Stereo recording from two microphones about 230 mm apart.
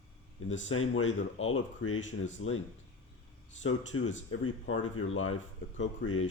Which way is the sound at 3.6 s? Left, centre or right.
Left.